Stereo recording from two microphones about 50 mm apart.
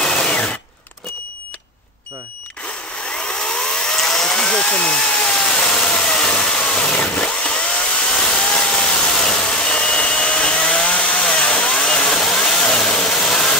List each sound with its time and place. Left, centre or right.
0.0 s drill: centre
3.1 s helicopter: centre